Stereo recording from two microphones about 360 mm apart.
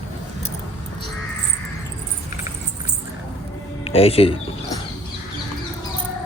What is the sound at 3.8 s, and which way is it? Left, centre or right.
Speech, centre.